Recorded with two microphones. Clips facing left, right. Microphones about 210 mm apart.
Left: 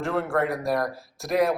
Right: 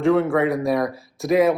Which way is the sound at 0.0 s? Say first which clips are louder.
Right 7 dB; centre (ahead or behind).